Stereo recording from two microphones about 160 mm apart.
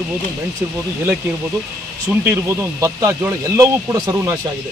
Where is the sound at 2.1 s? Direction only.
15° right (ahead or behind).